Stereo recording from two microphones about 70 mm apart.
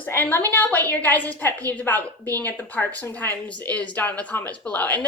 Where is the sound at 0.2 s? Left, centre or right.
Left.